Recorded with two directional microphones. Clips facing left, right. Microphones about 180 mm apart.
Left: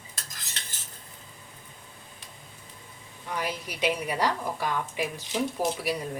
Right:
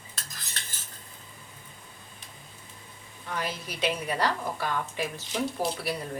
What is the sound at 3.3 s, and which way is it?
A woman's voice, 10° left (ahead or behind).